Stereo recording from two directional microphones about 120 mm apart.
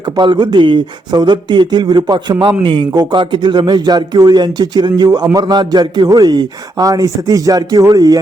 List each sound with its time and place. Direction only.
0.2 s speech: 40° right (ahead or behind)
2.9 s speech: 30° right (ahead or behind)
3.2 s speech: 40° right (ahead or behind)